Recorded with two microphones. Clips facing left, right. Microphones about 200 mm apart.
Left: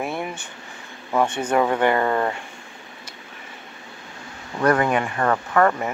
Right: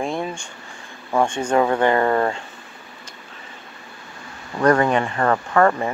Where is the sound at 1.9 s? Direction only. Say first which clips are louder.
Right 2 dB; 20° right (ahead or behind).